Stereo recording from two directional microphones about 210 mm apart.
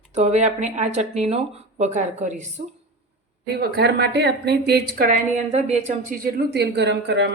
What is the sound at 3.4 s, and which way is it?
A woman's voice, 50° right (ahead or behind).